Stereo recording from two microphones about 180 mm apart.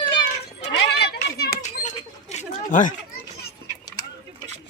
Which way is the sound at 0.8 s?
70° left (ahead or behind).